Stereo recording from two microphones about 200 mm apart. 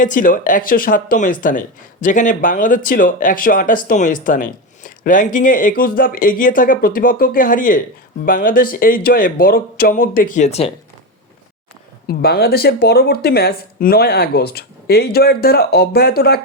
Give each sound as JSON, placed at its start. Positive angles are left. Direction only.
{"t": 0.0, "sound": "speech", "side_deg": 40}
{"t": 12.0, "sound": "speech", "side_deg": 50}